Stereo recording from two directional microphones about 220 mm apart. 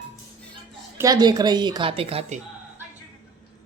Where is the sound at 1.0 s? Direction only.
15° right (ahead or behind).